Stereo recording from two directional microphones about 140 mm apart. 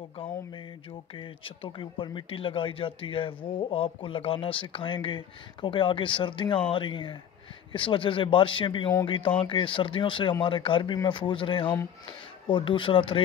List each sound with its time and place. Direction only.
0.2 s speech: 35° left (ahead or behind)